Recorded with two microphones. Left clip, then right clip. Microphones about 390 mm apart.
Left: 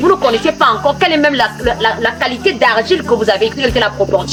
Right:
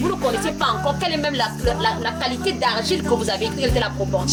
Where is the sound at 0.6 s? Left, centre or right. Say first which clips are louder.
Left 10 dB; right.